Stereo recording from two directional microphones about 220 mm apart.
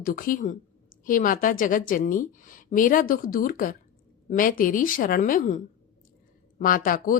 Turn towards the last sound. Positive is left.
turn(degrees=40)  # may be behind; listen again after turning